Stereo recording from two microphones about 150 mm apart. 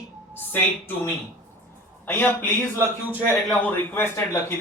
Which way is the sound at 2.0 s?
15° left (ahead or behind).